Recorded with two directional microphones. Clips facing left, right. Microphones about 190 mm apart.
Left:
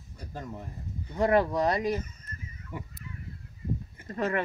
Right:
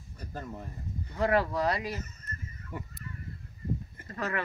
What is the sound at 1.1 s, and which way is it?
Speech, 20° left (ahead or behind).